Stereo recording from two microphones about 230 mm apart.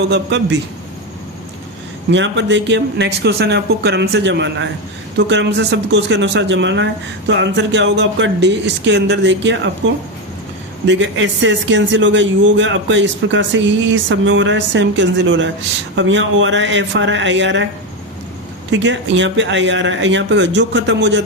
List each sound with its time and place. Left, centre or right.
0.1 s a man's voice: right
2.0 s a man's voice: right
10.8 s a man's voice: right
18.7 s a man's voice: right